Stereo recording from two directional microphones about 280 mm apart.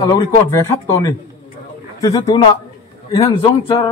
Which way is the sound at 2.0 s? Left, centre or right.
Centre.